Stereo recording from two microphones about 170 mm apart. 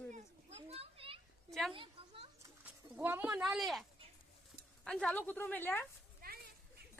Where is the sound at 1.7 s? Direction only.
30° right (ahead or behind).